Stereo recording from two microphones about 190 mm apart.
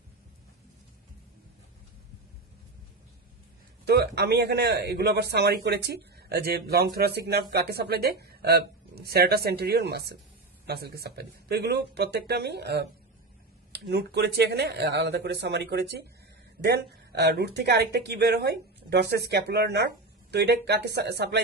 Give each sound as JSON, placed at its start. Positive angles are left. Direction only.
{"t": 3.8, "sound": "speech", "side_deg": -60}